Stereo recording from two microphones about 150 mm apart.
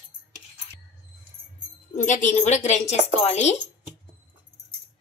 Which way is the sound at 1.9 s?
55° left (ahead or behind).